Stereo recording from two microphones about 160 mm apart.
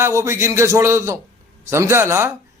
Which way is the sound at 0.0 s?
15° right (ahead or behind).